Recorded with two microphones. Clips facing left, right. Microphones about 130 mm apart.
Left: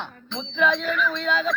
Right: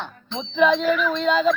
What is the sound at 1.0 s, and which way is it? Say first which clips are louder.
Speech: right 5 dB; 20° right (ahead or behind).